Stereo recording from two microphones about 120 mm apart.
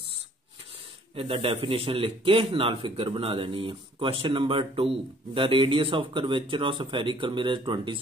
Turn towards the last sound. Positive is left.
turn(degrees=-40)  # may be behind; listen again after turning